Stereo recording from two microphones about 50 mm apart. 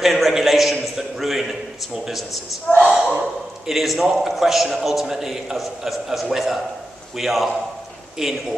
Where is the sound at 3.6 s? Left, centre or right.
Centre.